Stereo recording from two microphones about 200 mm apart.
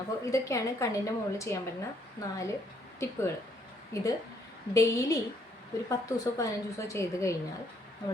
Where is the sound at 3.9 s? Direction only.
15° left (ahead or behind).